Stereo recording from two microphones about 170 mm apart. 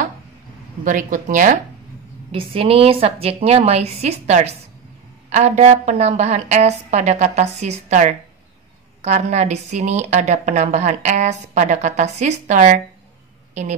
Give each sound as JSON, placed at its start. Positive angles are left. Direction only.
{"t": 0.8, "sound": "a woman's voice", "side_deg": -50}
{"t": 2.3, "sound": "a woman's voice", "side_deg": -35}